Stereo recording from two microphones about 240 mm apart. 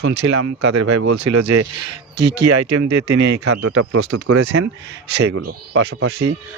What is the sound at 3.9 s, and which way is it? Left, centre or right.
Speech, right.